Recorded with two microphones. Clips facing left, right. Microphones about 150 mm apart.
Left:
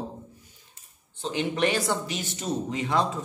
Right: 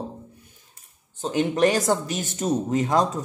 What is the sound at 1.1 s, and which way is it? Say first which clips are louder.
Speech: right 5 dB; 45° right (ahead or behind).